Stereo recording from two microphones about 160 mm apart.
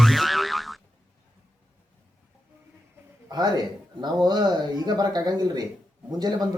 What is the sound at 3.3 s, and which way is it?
Speech, 25° right (ahead or behind).